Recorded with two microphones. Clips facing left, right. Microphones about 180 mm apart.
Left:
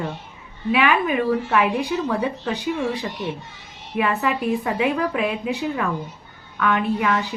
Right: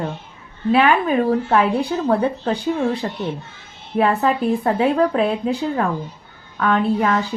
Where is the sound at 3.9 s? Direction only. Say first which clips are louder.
Right 4 dB; 35° right (ahead or behind).